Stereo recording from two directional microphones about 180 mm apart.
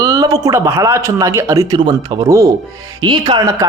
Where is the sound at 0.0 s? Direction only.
20° right (ahead or behind).